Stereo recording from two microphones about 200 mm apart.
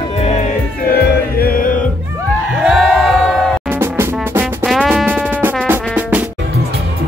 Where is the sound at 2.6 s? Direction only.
5° right (ahead or behind).